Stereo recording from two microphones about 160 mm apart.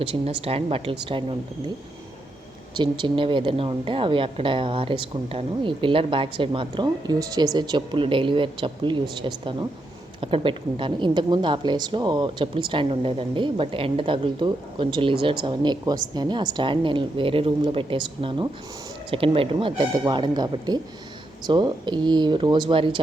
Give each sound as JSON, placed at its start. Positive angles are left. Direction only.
{"t": 0.0, "sound": "a woman's voice", "side_deg": -35}
{"t": 2.7, "sound": "a woman's voice", "side_deg": -30}